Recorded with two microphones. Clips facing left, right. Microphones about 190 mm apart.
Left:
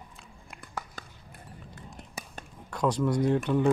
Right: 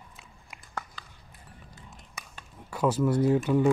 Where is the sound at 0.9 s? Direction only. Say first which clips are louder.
Left 4 dB; 55° left (ahead or behind).